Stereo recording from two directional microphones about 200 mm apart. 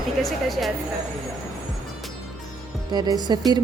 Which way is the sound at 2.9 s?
20° right (ahead or behind).